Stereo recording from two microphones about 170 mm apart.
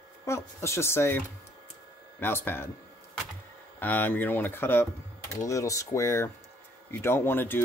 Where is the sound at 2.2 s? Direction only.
15° left (ahead or behind).